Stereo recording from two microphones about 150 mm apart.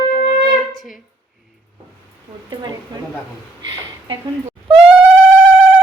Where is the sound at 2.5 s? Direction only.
30° right (ahead or behind).